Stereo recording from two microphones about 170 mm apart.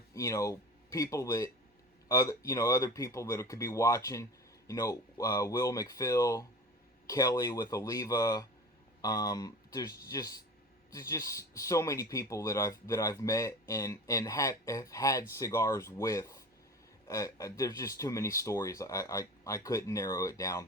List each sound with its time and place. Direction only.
0.1 s speech: 20° left (ahead or behind)